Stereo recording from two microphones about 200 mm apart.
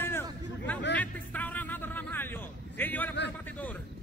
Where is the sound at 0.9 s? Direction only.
5° left (ahead or behind).